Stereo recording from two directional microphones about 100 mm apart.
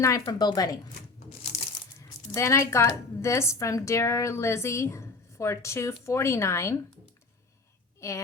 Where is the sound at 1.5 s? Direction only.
90° left.